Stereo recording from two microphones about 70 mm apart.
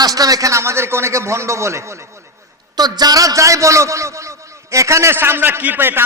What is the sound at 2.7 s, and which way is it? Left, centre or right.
A man's voice, right.